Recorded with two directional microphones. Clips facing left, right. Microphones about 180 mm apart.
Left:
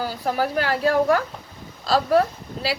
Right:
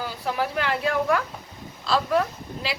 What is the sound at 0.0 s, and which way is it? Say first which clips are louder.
A woman's voice: left 4 dB; 40° left (ahead or behind).